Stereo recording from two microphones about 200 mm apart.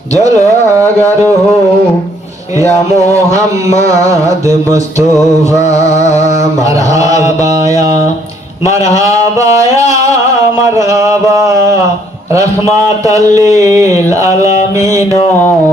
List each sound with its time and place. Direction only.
0.1 s a man's voice: 15° right (ahead or behind)
3.8 s a man's voice: 15° right (ahead or behind)
5.8 s a sound: 35° left (ahead or behind)
6.4 s a man's voice: 15° right (ahead or behind)